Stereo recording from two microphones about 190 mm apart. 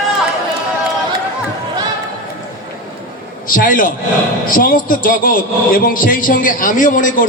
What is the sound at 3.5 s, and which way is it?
A man's voice, 45° left (ahead or behind).